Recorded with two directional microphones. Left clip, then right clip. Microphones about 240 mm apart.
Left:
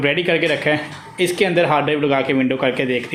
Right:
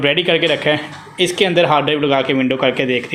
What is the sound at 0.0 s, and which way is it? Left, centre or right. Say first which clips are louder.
A man's voice: right 3 dB; centre.